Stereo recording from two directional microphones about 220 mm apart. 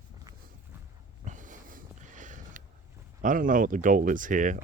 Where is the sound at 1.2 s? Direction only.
35° right (ahead or behind).